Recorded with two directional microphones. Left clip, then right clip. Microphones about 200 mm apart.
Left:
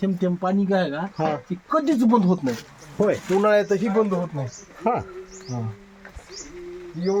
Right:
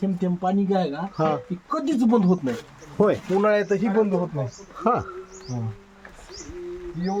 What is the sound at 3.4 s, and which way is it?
Speech, 10° left (ahead or behind).